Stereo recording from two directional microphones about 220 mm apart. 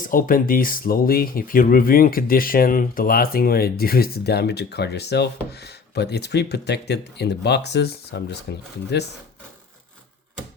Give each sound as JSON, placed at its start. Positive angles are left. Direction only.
{"t": 0.1, "sound": "speech", "side_deg": 40}